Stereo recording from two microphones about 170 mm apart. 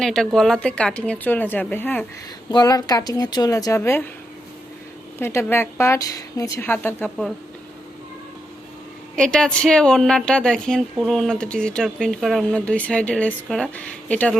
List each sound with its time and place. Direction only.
0.0 s a woman's voice: centre (ahead or behind)
2.5 s a woman's voice: 20° left (ahead or behind)
5.2 s a woman's voice: 15° left (ahead or behind)
9.1 s a woman's voice: 5° left (ahead or behind)